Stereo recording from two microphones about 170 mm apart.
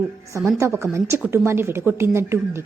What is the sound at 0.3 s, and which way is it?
A woman's voice, 15° right (ahead or behind).